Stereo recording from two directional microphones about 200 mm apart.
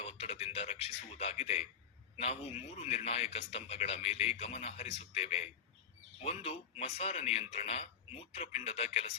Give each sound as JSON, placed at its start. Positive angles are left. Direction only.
{"t": 0.0, "sound": "a man's voice", "side_deg": 30}